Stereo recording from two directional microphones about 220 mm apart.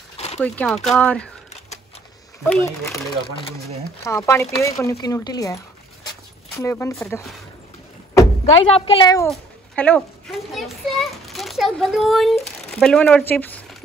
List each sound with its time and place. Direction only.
0.4 s speech: 5° left (ahead or behind)
2.4 s speech: 10° left (ahead or behind)
4.0 s speech: 10° left (ahead or behind)
8.6 s a woman's voice: 25° left (ahead or behind)
9.3 s cat: 5° left (ahead or behind)
10.5 s a child's voice: centre (ahead or behind)